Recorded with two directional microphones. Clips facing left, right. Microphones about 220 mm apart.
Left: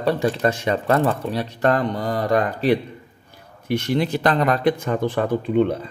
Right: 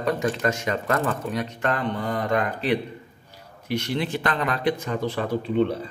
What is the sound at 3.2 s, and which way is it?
A man's voice, 50° left (ahead or behind).